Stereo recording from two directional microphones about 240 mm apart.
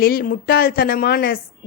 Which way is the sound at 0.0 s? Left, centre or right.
Left.